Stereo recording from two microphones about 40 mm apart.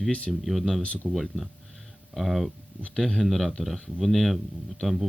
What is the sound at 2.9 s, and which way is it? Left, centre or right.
Speech, centre.